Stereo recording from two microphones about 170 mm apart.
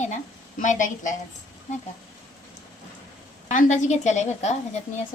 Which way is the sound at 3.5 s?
45° left (ahead or behind).